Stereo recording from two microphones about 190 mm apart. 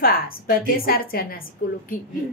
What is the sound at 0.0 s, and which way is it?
A woman's voice, 50° left (ahead or behind).